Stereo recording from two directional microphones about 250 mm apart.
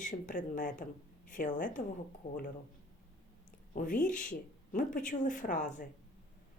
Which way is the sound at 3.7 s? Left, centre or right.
Left.